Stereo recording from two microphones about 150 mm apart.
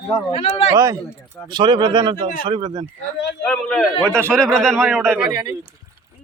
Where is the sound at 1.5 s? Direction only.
30° right (ahead or behind).